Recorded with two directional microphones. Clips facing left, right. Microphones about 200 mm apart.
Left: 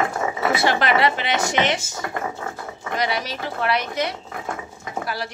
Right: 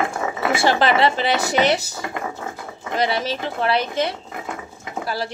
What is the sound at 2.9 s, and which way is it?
Speech, 30° right (ahead or behind).